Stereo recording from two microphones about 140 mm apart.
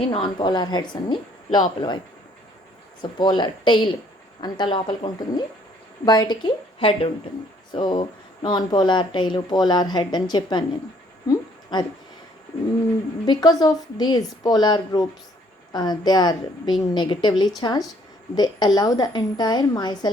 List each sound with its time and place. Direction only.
0.1 s speech: 35° left (ahead or behind)
3.0 s speech: 35° left (ahead or behind)
11.3 s a sound: 30° left (ahead or behind)
13.2 s a woman's voice: 30° left (ahead or behind)